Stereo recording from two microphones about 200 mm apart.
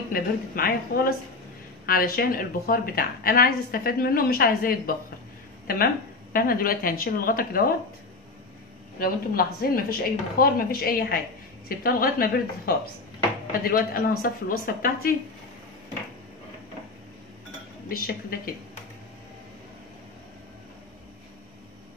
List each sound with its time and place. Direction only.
0.1 s a woman's voice: 45° left (ahead or behind)
6.3 s a woman's voice: 45° left (ahead or behind)
9.0 s a woman's voice: 45° left (ahead or behind)
17.8 s a woman's voice: 45° left (ahead or behind)